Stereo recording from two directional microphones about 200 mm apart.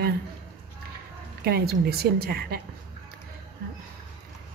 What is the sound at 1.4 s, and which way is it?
A woman's voice, 50° right (ahead or behind).